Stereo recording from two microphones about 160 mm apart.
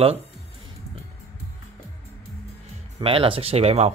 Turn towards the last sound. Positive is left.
turn(degrees=-40)  # may be behind; listen again after turning